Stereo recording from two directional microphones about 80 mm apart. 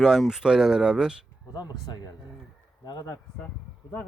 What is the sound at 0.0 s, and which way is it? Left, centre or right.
Speech, centre.